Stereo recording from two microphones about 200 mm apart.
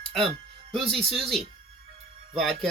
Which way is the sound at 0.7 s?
Centre (ahead or behind).